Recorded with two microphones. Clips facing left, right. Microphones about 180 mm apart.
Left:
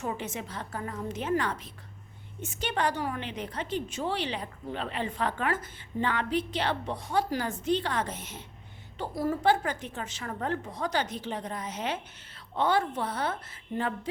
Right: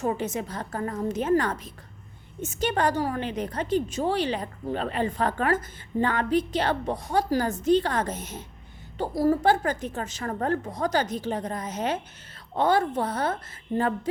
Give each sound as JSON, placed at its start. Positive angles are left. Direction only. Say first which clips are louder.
{"t": 0.0, "sound": "a woman's voice", "louder": "right 7 dB", "side_deg": -40}